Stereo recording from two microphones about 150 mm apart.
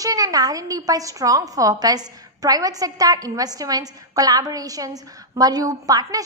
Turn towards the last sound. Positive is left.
turn(degrees=-25)  # may be behind; listen again after turning